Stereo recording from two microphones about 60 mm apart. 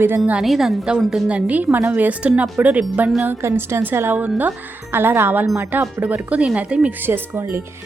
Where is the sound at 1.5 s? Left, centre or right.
Right.